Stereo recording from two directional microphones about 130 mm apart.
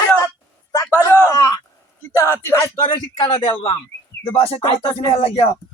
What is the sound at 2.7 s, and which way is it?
Speech, 35° left (ahead or behind).